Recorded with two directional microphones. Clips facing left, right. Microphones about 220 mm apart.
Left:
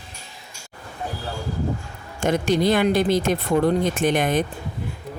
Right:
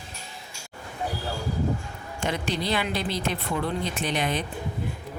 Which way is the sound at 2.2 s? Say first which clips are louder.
Left 9 dB; 45° left (ahead or behind).